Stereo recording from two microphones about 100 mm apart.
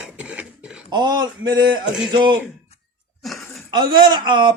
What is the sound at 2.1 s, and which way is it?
Speech, 50° right (ahead or behind).